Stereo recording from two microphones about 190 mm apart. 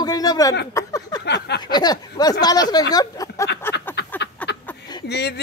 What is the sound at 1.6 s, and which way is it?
Speech, 20° left (ahead or behind).